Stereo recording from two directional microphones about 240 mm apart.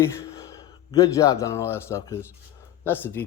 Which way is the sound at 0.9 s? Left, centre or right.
Centre.